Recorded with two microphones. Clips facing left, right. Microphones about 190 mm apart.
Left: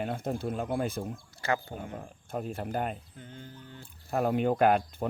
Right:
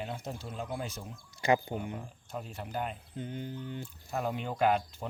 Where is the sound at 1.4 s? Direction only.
15° right (ahead or behind).